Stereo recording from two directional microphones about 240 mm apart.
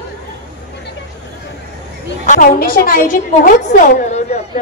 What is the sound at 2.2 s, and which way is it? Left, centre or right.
A woman's voice, left.